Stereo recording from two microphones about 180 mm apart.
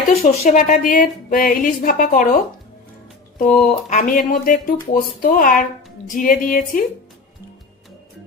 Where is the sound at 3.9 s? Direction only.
50° left (ahead or behind).